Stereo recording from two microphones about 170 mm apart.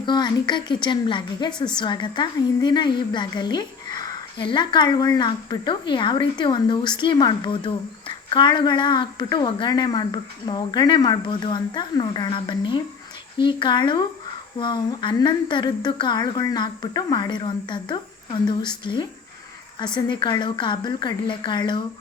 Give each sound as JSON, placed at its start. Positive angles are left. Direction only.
{"t": 0.0, "sound": "speech", "side_deg": 25}